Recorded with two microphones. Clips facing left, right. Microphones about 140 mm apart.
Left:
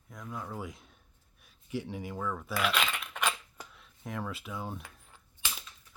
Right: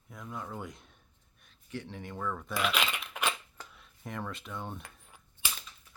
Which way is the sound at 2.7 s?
10° right (ahead or behind).